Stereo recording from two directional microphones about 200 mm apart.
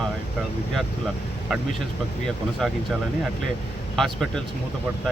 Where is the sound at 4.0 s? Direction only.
Centre (ahead or behind).